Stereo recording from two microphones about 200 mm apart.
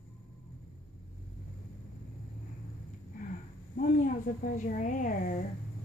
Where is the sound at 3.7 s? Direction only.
45° left (ahead or behind).